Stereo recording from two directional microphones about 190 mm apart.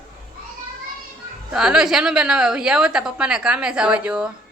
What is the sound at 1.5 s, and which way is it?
A woman's voice, 5° right (ahead or behind).